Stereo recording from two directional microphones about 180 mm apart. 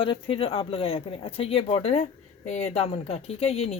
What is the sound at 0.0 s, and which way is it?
Speech, 30° left (ahead or behind).